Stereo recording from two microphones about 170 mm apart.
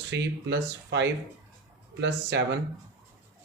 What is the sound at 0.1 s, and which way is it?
Speech, 90° right.